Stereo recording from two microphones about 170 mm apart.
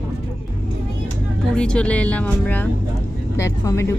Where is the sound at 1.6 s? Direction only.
5° left (ahead or behind).